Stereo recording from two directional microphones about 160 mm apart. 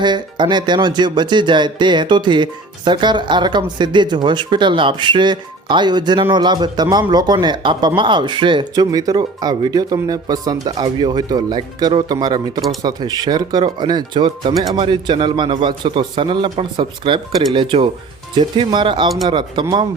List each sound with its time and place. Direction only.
0.0 s a man's voice: 30° right (ahead or behind)